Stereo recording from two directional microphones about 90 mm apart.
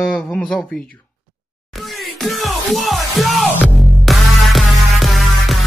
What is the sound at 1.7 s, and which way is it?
Music, centre (ahead or behind).